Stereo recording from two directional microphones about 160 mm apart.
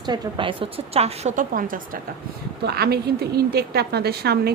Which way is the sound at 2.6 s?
85° right.